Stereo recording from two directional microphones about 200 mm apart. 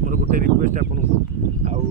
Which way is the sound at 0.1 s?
45° right (ahead or behind).